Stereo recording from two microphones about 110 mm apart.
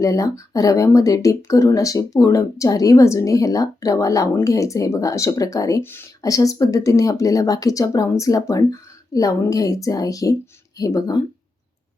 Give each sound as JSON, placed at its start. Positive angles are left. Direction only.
{"t": 0.0, "sound": "speech", "side_deg": 30}
{"t": 5.8, "sound": "speech", "side_deg": 20}
{"t": 6.2, "sound": "speech", "side_deg": 30}